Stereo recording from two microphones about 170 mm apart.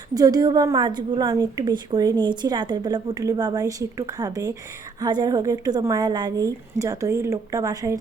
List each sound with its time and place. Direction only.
0.1 s a woman's voice: 20° right (ahead or behind)